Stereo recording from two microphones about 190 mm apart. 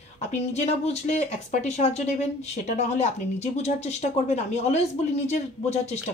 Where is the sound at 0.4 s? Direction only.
35° left (ahead or behind).